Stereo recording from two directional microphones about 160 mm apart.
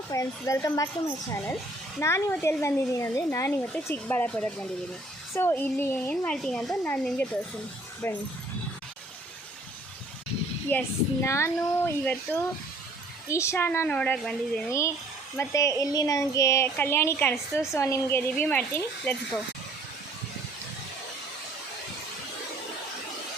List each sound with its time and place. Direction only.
0.1 s a woman's voice: 20° left (ahead or behind)
10.7 s a woman's voice: 15° left (ahead or behind)